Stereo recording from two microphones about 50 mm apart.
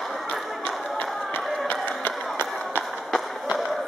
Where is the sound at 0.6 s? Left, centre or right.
Left.